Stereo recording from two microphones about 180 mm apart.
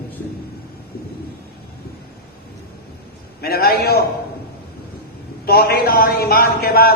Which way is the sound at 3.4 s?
60° left (ahead or behind).